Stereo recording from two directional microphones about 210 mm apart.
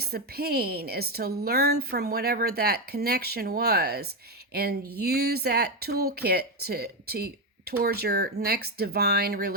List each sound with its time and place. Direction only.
0.0 s speech: 50° right (ahead or behind)